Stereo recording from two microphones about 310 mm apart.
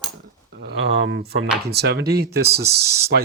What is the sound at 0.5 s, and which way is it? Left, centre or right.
Speech, right.